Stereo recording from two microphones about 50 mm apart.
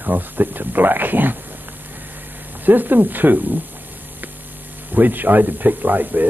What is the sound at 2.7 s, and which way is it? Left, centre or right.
Speech, right.